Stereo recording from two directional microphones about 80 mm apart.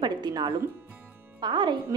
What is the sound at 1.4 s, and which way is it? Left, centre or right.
Speech, right.